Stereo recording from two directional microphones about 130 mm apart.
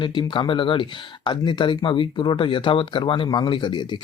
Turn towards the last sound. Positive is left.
turn(degrees=35)  # may be behind; listen again after turning